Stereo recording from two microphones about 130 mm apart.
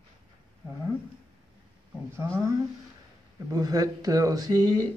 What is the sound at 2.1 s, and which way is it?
Speech, 20° right (ahead or behind).